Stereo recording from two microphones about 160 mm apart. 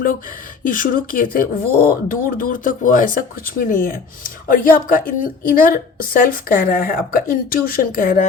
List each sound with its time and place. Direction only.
0.6 s speech: 60° left (ahead or behind)